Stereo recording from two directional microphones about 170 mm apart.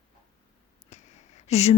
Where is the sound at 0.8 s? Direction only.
40° left (ahead or behind).